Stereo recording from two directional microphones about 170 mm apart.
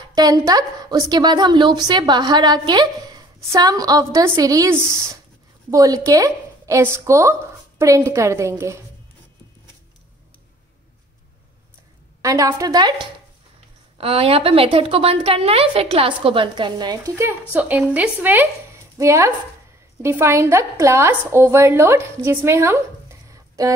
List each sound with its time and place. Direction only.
0.1 s a woman's voice: 20° right (ahead or behind)
12.2 s a woman's voice: 20° right (ahead or behind)
13.9 s a woman's voice: 35° right (ahead or behind); by 23.7 s 20° right (ahead or behind)